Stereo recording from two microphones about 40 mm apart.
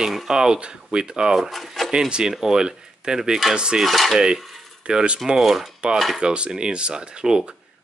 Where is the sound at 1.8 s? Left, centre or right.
Right.